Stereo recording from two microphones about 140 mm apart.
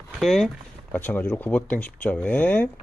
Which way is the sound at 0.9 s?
15° left (ahead or behind).